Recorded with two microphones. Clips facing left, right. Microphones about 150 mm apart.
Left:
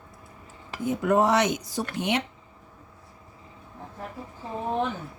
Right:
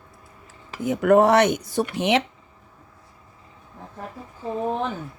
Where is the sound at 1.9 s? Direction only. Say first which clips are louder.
Right 5 dB; 90° right.